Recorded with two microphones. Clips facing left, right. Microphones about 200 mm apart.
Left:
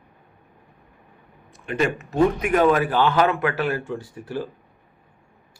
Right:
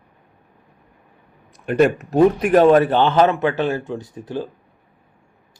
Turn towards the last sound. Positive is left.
turn(degrees=-20)  # may be behind; listen again after turning